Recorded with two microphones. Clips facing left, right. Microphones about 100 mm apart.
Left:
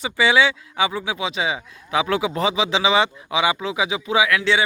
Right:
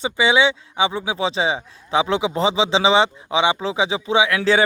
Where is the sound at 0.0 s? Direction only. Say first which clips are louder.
Right 1 dB; 20° right (ahead or behind).